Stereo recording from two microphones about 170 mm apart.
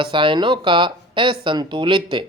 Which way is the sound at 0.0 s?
30° right (ahead or behind).